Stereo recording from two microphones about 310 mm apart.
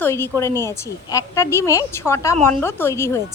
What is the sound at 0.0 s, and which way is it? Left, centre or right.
A woman's voice, centre.